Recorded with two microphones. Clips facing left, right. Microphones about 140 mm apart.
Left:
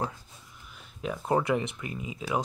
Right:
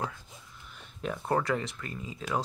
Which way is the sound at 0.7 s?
5° left (ahead or behind).